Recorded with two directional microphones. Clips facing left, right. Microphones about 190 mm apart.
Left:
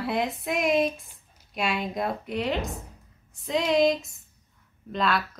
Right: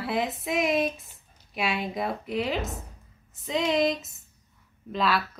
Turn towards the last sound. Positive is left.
turn(degrees=-5)  # may be behind; listen again after turning